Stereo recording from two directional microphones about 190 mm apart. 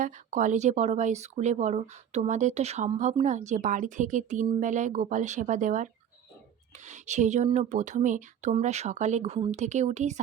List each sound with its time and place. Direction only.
0.0 s speech: 40° right (ahead or behind)